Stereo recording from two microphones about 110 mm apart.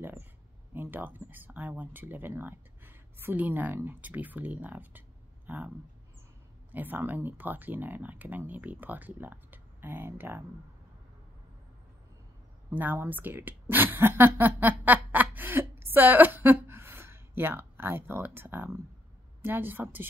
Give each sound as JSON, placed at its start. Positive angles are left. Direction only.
{"t": 0.0, "sound": "a sound", "side_deg": -20}
{"t": 0.7, "sound": "speech", "side_deg": -20}
{"t": 6.7, "sound": "speech", "side_deg": -15}
{"t": 12.7, "sound": "a woman's voice", "side_deg": -20}